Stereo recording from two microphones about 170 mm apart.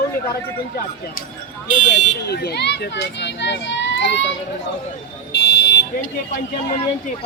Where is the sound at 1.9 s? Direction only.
70° left (ahead or behind); by 4.3 s 90° left.